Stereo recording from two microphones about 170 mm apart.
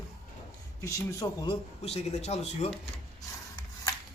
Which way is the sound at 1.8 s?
40° left (ahead or behind).